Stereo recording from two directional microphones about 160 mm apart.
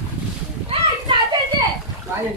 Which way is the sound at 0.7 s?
30° right (ahead or behind).